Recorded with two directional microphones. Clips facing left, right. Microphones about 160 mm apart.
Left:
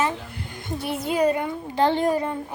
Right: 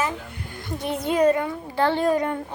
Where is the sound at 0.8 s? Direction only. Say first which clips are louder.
Right 2 dB; 5° left (ahead or behind).